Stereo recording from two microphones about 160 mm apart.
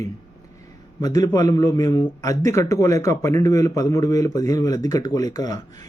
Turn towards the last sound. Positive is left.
turn(degrees=25)  # may be behind; listen again after turning